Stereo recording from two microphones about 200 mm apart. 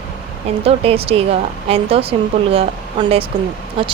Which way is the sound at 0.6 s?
30° right (ahead or behind).